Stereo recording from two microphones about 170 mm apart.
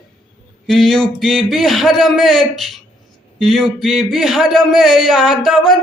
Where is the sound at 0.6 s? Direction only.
Centre (ahead or behind).